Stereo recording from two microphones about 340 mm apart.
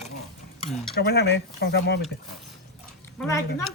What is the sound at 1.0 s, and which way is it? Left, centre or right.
Speech, left.